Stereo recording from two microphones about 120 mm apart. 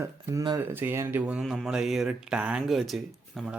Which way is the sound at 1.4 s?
Centre (ahead or behind).